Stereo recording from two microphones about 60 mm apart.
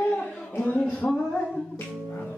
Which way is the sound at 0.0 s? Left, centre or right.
Centre.